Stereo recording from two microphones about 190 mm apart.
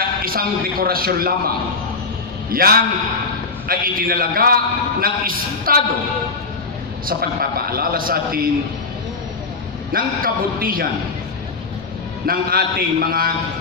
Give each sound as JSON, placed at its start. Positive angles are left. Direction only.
{"t": 0.2, "sound": "a man's voice", "side_deg": -50}
{"t": 2.5, "sound": "a man's voice", "side_deg": -50}
{"t": 7.1, "sound": "a man's voice", "side_deg": -55}
{"t": 9.9, "sound": "a man's voice", "side_deg": -50}
{"t": 12.3, "sound": "a man's voice", "side_deg": -50}